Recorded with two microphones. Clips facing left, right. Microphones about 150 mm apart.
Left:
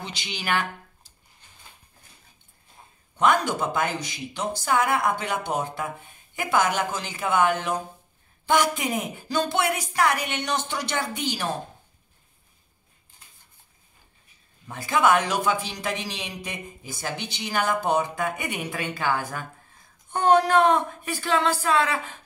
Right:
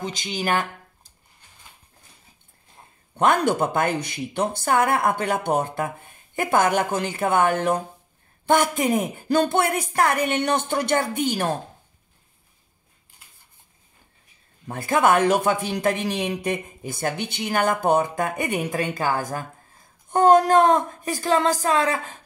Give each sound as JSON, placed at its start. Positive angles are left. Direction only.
{"t": 0.0, "sound": "speech", "side_deg": -45}
{"t": 3.2, "sound": "speech", "side_deg": -55}
{"t": 14.7, "sound": "speech", "side_deg": -50}